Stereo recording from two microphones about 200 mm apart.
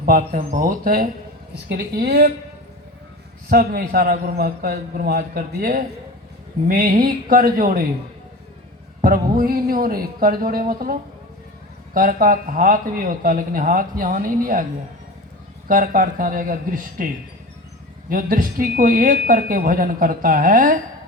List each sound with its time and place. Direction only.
0.2 s speech: 30° right (ahead or behind); by 2.3 s 55° right (ahead or behind)
3.5 s speech: 50° right (ahead or behind)
9.0 s speech: 45° right (ahead or behind)
11.9 s speech: 45° right (ahead or behind)
15.6 s speech: 40° right (ahead or behind)
18.1 s speech: 45° right (ahead or behind)